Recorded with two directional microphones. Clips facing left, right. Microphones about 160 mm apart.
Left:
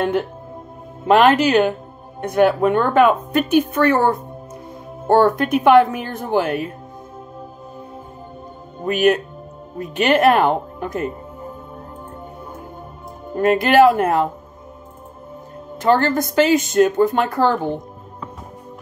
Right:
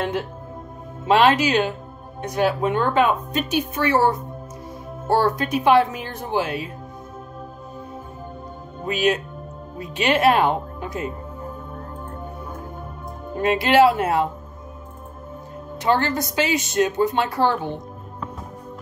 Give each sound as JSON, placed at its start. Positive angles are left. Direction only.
{"t": 1.0, "sound": "speech", "side_deg": 55}
{"t": 8.8, "sound": "speech", "side_deg": 55}
{"t": 13.4, "sound": "speech", "side_deg": 50}
{"t": 15.8, "sound": "speech", "side_deg": 50}